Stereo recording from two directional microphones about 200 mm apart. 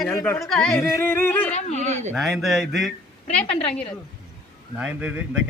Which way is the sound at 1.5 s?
35° left (ahead or behind).